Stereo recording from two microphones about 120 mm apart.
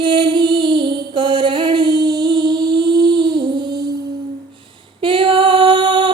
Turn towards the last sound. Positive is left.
turn(degrees=-40)  # may be behind; listen again after turning